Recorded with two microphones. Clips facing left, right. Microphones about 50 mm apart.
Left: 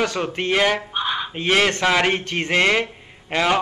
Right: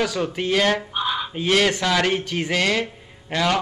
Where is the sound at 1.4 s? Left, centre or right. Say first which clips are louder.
Left 1 dB; left.